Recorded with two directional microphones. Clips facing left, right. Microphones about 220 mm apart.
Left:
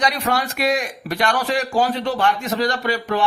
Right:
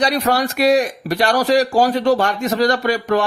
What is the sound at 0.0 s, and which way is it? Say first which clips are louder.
A man's voice: right 4 dB; 40° right (ahead or behind).